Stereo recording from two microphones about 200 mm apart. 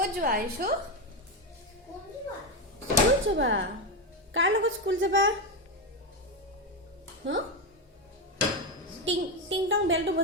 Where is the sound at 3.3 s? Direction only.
70° right (ahead or behind).